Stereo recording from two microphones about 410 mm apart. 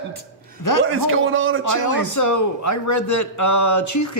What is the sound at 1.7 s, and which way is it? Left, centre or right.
A man's voice, left.